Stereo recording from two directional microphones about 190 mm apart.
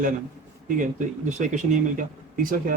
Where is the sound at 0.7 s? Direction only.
45° right (ahead or behind).